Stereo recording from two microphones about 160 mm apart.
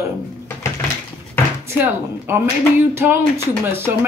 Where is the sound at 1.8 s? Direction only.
15° right (ahead or behind).